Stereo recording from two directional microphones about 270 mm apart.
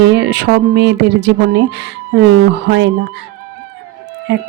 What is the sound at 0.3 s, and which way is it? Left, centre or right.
Speech, right.